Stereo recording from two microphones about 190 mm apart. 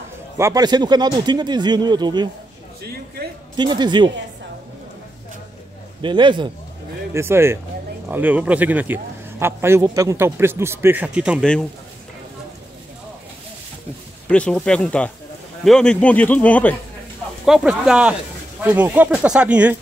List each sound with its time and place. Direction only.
0.4 s speech: 20° right (ahead or behind)
2.8 s a man's voice: 55° right (ahead or behind)
3.5 s speech: 25° right (ahead or behind)
6.0 s speech: 25° right (ahead or behind)
7.2 s a man's voice: 15° right (ahead or behind)
14.3 s speech: 5° left (ahead or behind)
17.5 s a man's voice: 5° right (ahead or behind)